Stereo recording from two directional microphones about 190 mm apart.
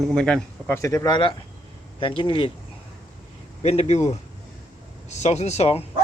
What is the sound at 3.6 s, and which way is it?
Speech, 35° left (ahead or behind).